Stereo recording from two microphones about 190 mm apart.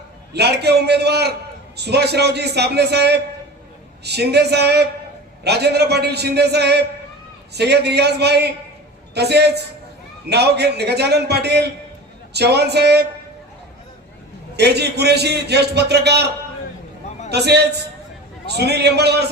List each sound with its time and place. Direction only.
0.3 s a man's voice: 60° right (ahead or behind)
14.5 s a man's voice: 60° right (ahead or behind)
17.3 s a man's voice: 60° right (ahead or behind)